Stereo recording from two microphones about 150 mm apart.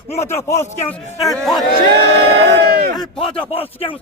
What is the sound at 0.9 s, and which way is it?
Speech, centre (ahead or behind).